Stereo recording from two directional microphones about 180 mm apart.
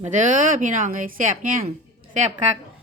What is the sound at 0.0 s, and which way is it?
A woman's voice, 45° right (ahead or behind).